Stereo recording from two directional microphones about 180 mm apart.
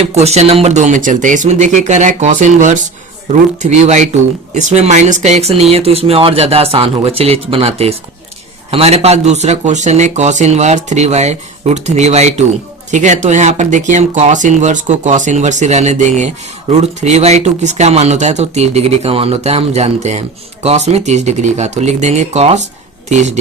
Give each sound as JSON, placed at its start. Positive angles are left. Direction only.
{"t": 0.0, "sound": "speech", "side_deg": -35}